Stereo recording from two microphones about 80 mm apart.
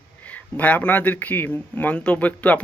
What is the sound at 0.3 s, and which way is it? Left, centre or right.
Speech, centre.